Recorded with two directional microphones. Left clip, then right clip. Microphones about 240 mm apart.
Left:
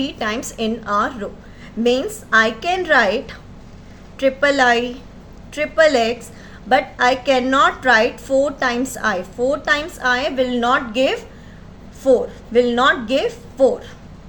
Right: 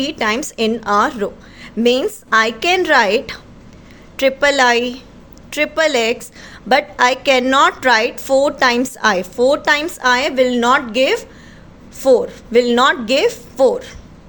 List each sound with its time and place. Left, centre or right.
0.0 s a woman's voice: right